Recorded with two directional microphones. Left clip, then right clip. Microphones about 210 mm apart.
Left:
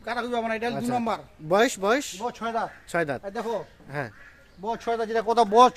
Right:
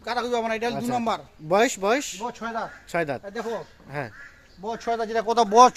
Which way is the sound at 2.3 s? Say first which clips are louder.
Left 2 dB; 25° left (ahead or behind).